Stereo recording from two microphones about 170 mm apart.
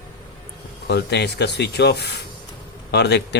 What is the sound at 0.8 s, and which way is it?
Speech, 80° left.